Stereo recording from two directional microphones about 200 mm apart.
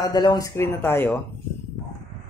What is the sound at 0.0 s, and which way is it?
Speech, 20° left (ahead or behind).